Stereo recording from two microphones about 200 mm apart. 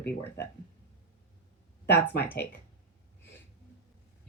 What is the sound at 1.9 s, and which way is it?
Speech, 55° left (ahead or behind).